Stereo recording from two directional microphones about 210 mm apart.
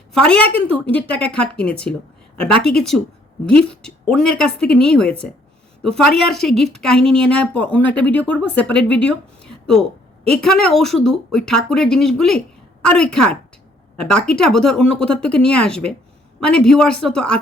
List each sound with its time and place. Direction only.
0.1 s a woman's voice: 5° left (ahead or behind)